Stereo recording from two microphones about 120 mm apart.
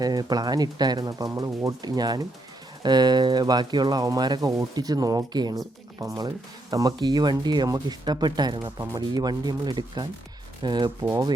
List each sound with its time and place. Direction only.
0.0 s speech: 35° right (ahead or behind)
11.1 s rub: 30° right (ahead or behind)